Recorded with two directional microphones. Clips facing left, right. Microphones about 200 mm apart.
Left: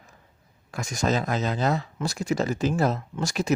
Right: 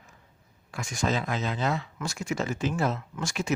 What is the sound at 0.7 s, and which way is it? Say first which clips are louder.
Speech: left 3 dB; 40° left (ahead or behind).